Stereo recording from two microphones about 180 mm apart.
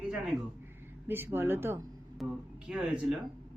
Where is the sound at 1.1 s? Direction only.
10° right (ahead or behind).